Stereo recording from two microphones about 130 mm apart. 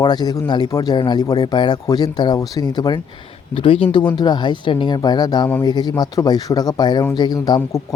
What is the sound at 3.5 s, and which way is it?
Speech, 45° left (ahead or behind).